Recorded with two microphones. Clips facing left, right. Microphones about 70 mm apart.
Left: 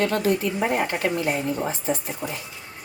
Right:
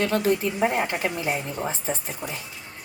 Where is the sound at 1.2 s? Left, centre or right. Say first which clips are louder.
Left 3 dB; centre.